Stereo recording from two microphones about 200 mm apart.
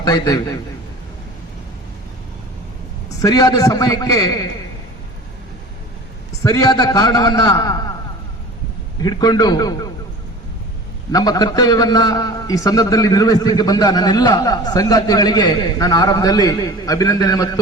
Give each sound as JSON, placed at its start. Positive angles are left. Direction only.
{"t": 0.0, "sound": "a man's voice", "side_deg": 20}
{"t": 3.2, "sound": "a man's voice", "side_deg": 20}
{"t": 6.4, "sound": "a man's voice", "side_deg": 20}
{"t": 9.0, "sound": "a man's voice", "side_deg": 20}
{"t": 11.1, "sound": "a man's voice", "side_deg": 20}